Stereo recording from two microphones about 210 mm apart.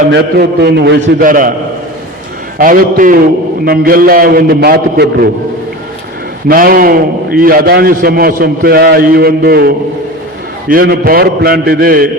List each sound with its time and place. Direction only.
0.1 s a man's voice: 50° right (ahead or behind)
2.6 s a man's voice: 40° right (ahead or behind)
6.5 s a man's voice: 45° right (ahead or behind)